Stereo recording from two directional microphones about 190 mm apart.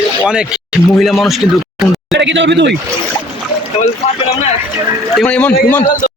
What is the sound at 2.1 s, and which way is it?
Speech, 70° right (ahead or behind).